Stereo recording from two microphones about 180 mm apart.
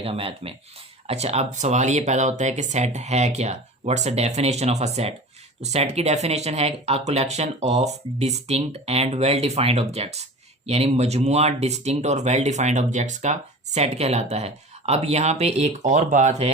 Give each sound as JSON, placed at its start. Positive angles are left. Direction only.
{"t": 0.0, "sound": "speech", "side_deg": -30}